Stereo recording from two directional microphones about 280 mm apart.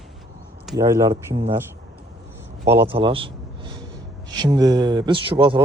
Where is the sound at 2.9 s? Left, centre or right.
Centre.